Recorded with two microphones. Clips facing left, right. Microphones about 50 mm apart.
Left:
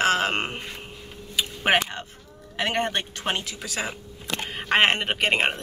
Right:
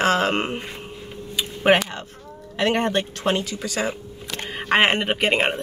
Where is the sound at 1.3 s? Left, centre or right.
Centre.